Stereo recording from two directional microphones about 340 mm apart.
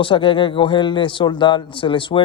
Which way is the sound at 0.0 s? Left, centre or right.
Centre.